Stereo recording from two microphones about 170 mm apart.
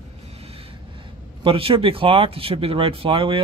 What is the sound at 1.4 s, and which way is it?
Speech, 30° right (ahead or behind).